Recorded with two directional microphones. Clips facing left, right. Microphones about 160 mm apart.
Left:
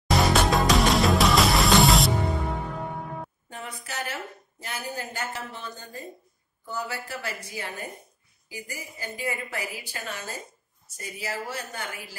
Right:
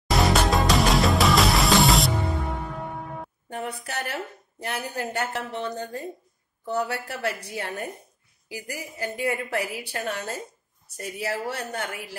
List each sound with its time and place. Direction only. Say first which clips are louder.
0.1 s music: even; centre (ahead or behind)
3.4 s a woman's voice: right 6 dB; 60° right (ahead or behind)